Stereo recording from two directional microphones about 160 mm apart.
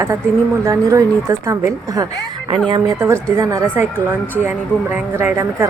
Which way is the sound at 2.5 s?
30° right (ahead or behind).